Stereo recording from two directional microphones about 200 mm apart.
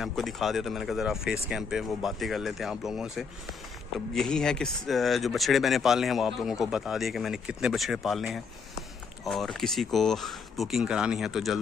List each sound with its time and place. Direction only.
0.0 s speech: centre (ahead or behind)